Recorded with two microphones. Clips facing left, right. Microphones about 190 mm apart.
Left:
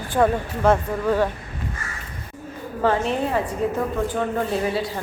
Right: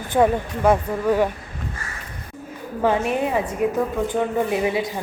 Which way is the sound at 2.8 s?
10° right (ahead or behind).